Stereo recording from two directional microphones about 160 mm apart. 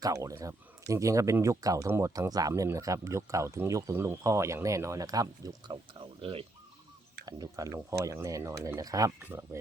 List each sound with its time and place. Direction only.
0.0 s speech: 20° right (ahead or behind)
7.3 s speech: 20° right (ahead or behind)